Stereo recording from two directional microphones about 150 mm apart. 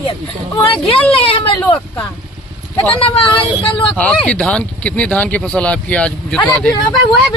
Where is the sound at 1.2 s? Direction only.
40° left (ahead or behind).